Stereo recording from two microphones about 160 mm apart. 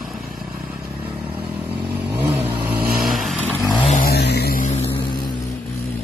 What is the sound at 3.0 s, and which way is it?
Vehicle, centre (ahead or behind).